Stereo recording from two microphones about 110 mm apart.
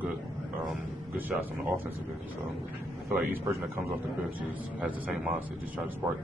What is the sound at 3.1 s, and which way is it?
A man's voice, 20° right (ahead or behind).